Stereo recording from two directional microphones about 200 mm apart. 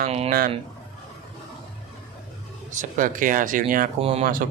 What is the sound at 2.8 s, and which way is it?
Speech, 40° right (ahead or behind).